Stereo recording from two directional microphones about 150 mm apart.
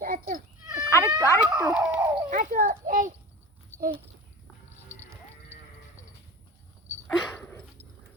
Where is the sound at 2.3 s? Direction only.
60° right (ahead or behind).